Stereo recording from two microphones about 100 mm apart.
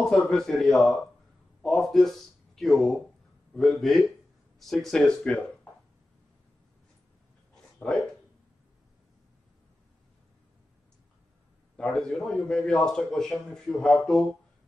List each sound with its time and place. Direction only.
0.0 s a man's voice: 5° left (ahead or behind)
11.7 s a man's voice: 10° left (ahead or behind)